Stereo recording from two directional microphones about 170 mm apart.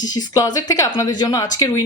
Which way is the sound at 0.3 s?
20° left (ahead or behind).